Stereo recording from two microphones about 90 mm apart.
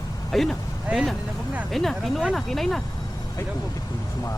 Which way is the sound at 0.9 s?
5° right (ahead or behind).